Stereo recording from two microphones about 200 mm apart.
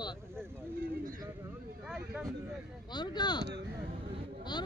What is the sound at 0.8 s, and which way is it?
Speech, 45° right (ahead or behind).